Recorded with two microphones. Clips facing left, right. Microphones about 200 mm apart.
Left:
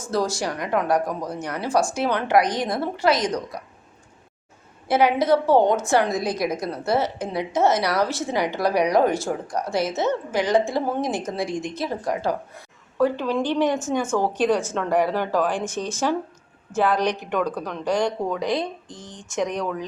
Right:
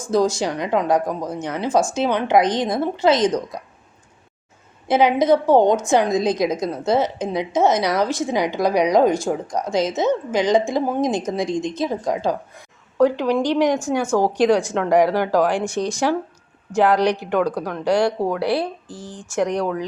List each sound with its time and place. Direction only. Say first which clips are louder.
0.1 s a woman's voice: right 5 dB; 20° right (ahead or behind)
4.9 s a woman's voice: right 3 dB; 20° right (ahead or behind)